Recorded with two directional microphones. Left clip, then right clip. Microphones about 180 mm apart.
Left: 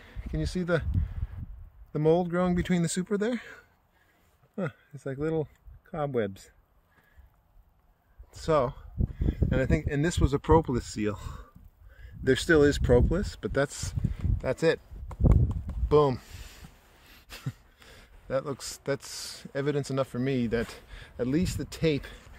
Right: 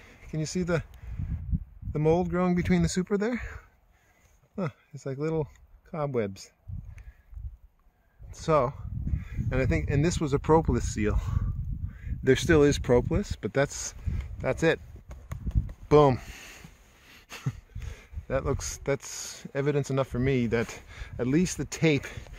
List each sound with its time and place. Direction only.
0.0 s a sound: 15° right (ahead or behind)
0.6 s speech: 15° right (ahead or behind)
1.9 s speech: 10° right (ahead or behind)
2.5 s speech: 25° right (ahead or behind)
4.6 s speech: 25° right (ahead or behind)
8.3 s speech: 30° right (ahead or behind)
15.9 s speech: 45° right (ahead or behind)
20.8 s a sound: 35° right (ahead or behind)
21.3 s speech: 50° right (ahead or behind)